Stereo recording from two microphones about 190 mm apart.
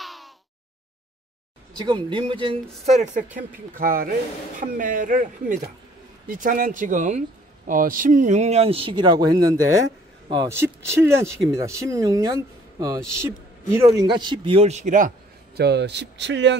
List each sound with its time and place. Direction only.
0.0 s a sound: centre (ahead or behind)
1.8 s speech: 25° right (ahead or behind)
3.3 s a man's voice: 45° right (ahead or behind); by 16.5 s 70° right (ahead or behind)